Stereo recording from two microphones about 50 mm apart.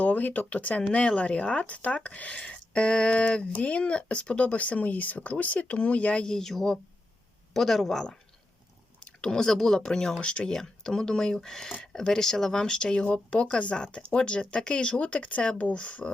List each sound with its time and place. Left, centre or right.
0.0 s speech: left; by 8.0 s centre
9.0 s speech: centre
10.2 s speech: left